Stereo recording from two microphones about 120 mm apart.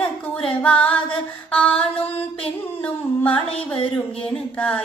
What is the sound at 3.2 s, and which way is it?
Music, 50° left (ahead or behind).